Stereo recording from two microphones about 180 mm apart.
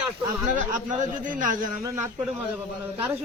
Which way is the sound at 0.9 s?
45° right (ahead or behind).